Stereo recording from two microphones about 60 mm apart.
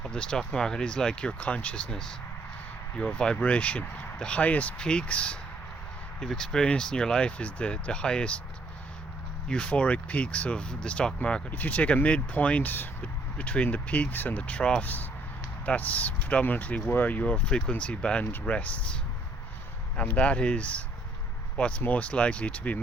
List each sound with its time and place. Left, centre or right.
0.0 s speech: centre
6.1 s speech: centre
9.5 s speech: centre
11.5 s speech: left
13.4 s speech: left
18.3 s speech: left
20.0 s speech: left